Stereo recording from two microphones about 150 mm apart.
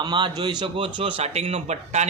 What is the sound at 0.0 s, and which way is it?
A man's voice, 30° right (ahead or behind).